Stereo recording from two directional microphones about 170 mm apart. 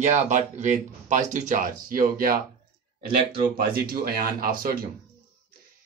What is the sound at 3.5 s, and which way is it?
Speech, 60° right (ahead or behind).